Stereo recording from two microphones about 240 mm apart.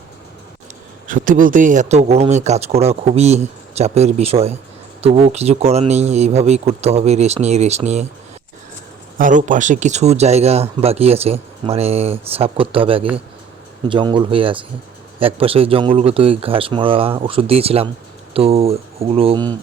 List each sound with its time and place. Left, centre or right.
1.0 s speech: right
9.1 s speech: right